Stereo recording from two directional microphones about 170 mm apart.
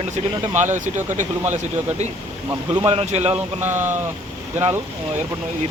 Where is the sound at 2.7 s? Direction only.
30° right (ahead or behind).